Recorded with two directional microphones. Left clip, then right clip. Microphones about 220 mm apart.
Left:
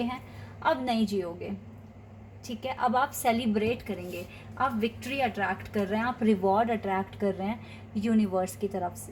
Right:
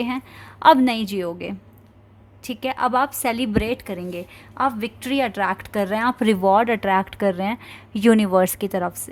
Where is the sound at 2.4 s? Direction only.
40° right (ahead or behind).